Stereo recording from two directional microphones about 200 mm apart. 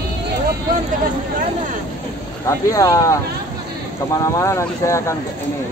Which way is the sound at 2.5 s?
15° left (ahead or behind).